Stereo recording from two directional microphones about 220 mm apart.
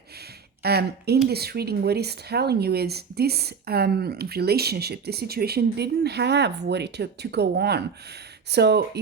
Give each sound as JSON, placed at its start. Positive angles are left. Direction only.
{"t": 0.6, "sound": "speech", "side_deg": -45}